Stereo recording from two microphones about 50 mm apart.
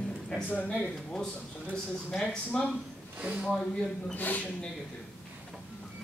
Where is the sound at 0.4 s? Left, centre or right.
Left.